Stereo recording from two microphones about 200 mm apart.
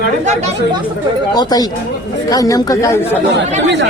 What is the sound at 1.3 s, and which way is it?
Speech, 20° left (ahead or behind).